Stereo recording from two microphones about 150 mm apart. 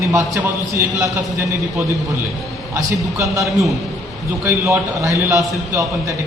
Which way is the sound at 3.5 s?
Centre (ahead or behind).